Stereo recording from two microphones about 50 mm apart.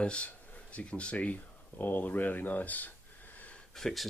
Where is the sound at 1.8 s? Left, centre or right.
Left.